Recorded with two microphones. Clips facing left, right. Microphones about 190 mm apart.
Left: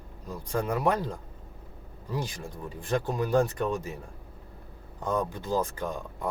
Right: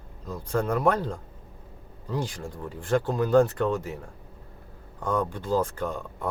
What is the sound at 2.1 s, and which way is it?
Speech, 15° left (ahead or behind).